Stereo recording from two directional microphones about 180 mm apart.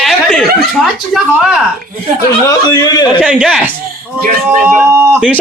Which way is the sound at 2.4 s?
20° left (ahead or behind).